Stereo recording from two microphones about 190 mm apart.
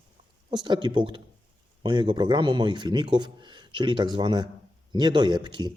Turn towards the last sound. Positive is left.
turn(degrees=-25)  # may be behind; listen again after turning